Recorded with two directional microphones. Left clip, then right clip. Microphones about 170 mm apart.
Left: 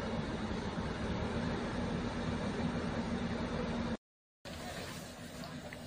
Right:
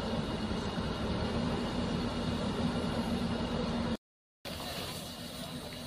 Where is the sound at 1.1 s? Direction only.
5° left (ahead or behind).